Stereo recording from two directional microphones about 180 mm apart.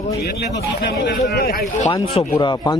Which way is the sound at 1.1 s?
60° left (ahead or behind).